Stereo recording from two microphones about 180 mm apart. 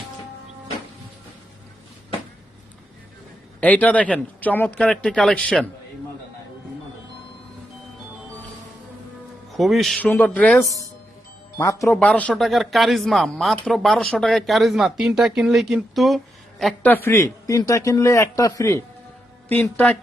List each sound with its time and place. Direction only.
3.6 s speech: 10° left (ahead or behind)
9.5 s speech: centre (ahead or behind)
11.5 s speech: 15° left (ahead or behind)